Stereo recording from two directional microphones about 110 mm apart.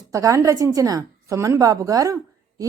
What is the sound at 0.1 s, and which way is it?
Speech, 30° right (ahead or behind).